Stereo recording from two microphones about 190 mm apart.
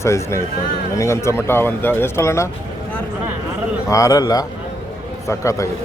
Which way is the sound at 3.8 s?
15° left (ahead or behind).